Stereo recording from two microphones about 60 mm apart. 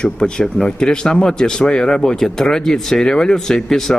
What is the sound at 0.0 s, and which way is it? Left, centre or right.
Speech, centre.